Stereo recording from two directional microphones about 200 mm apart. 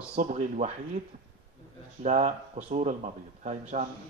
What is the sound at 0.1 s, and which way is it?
Speech, 35° right (ahead or behind).